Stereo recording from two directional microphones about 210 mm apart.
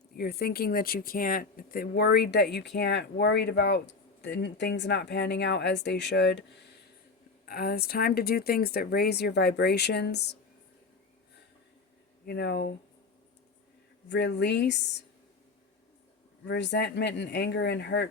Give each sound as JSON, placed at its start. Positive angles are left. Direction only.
{"t": 0.2, "sound": "speech", "side_deg": 45}
{"t": 12.2, "sound": "speech", "side_deg": 50}
{"t": 14.1, "sound": "speech", "side_deg": 55}
{"t": 16.5, "sound": "speech", "side_deg": 55}